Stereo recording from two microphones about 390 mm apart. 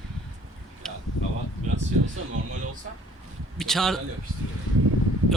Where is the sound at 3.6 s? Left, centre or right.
Centre.